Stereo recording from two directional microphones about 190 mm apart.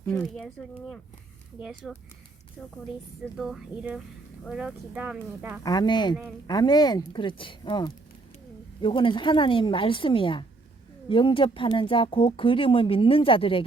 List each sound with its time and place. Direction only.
0.0 s speech: 10° left (ahead or behind)
3.3 s speech: centre (ahead or behind)
5.6 s speech: 20° left (ahead or behind)